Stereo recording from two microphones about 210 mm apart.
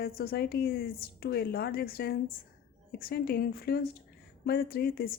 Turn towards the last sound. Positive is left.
turn(degrees=45)  # may be behind; listen again after turning